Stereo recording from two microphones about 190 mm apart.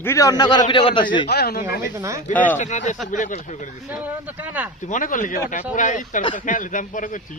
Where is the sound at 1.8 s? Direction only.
15° right (ahead or behind).